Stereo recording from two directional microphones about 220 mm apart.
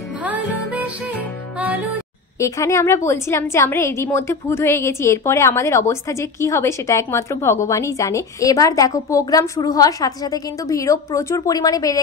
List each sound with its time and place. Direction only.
0.2 s music: 5° right (ahead or behind)
2.3 s a woman's voice: 15° left (ahead or behind)